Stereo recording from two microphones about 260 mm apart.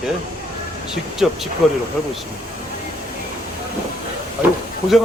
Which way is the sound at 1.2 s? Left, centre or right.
Centre.